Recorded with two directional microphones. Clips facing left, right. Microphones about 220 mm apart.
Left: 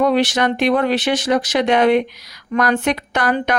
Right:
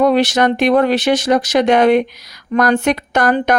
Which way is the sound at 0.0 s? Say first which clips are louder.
Right 3 dB; 45° right (ahead or behind).